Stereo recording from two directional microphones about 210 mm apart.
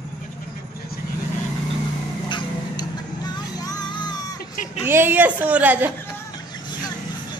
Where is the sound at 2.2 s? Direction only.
20° left (ahead or behind).